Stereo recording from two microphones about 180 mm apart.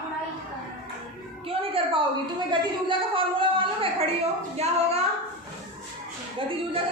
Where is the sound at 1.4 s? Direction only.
30° right (ahead or behind).